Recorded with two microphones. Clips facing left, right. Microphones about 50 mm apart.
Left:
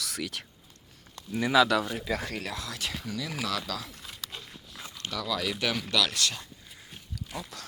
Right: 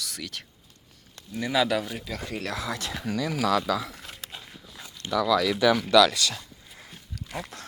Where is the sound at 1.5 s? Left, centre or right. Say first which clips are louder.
Left 2 dB; centre.